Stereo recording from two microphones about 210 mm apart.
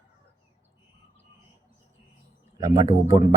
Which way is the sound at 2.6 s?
15° right (ahead or behind).